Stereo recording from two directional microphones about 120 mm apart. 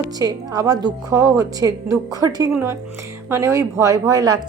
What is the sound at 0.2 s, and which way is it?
A woman's voice, 30° right (ahead or behind).